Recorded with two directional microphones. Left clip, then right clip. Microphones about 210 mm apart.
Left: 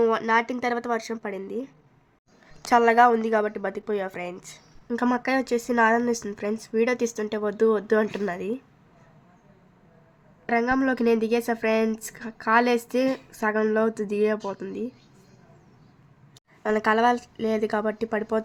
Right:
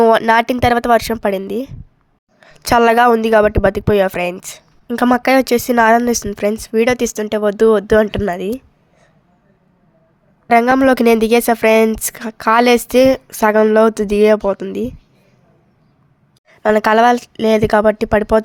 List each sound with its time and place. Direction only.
0.0 s speech: 40° right (ahead or behind)
10.5 s speech: 50° right (ahead or behind)
16.6 s speech: 45° right (ahead or behind)